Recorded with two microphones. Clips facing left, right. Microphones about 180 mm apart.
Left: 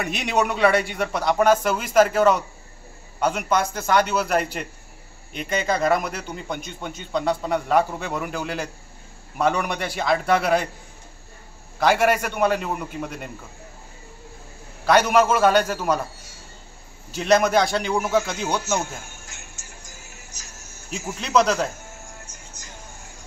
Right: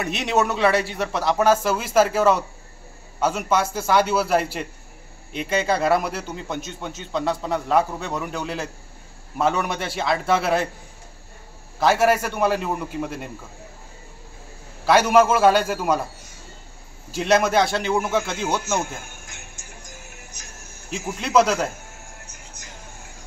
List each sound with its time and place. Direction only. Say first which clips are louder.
0.0 s a man's voice: right 1 dB; centre (ahead or behind)
11.8 s a man's voice: right 1 dB; 5° right (ahead or behind)
14.9 s a man's voice: right 1 dB; 5° right (ahead or behind)
17.1 s a man's voice: left 1 dB; 5° right (ahead or behind)
20.1 s music: right 2 dB; 55° right (ahead or behind)
21.0 s a man's voice: right 2 dB; 5° right (ahead or behind)